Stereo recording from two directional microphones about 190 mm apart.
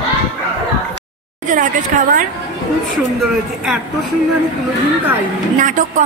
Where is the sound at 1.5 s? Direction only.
45° right (ahead or behind).